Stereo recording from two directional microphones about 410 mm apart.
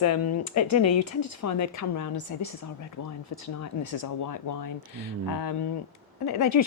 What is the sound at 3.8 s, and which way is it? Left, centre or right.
Speech, left.